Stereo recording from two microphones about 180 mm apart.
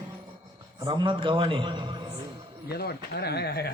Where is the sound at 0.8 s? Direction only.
25° right (ahead or behind).